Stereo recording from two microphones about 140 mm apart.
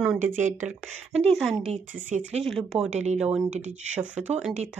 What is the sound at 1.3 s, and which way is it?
Speech, centre (ahead or behind).